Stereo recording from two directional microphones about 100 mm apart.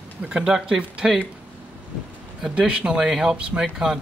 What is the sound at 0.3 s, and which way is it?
Speech, 10° right (ahead or behind).